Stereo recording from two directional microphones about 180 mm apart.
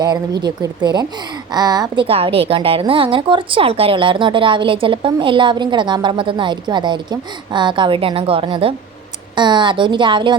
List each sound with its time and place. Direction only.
0.4 s a woman's voice: 25° right (ahead or behind)